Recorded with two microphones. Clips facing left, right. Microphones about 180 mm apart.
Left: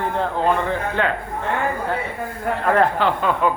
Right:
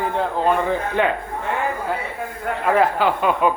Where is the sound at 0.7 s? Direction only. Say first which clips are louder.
Right 2 dB; 15° right (ahead or behind).